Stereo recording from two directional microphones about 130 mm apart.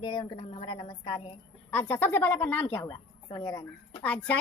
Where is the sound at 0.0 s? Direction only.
40° left (ahead or behind).